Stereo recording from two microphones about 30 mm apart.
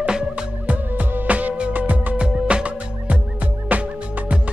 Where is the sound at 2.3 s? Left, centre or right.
Right.